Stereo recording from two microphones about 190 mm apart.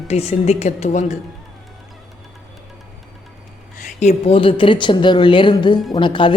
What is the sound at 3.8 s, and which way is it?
A woman's voice, 35° left (ahead or behind).